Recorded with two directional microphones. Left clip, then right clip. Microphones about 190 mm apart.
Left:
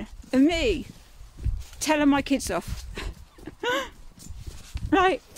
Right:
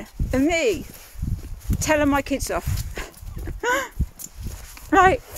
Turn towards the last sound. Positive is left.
turn(degrees=0)  # may be behind; listen again after turning